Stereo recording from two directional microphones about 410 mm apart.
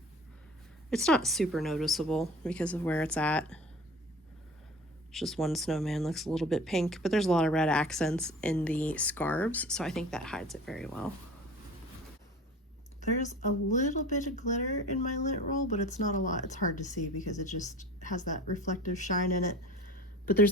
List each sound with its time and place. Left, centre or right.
0.9 s speech: centre
5.1 s speech: centre
13.0 s speech: centre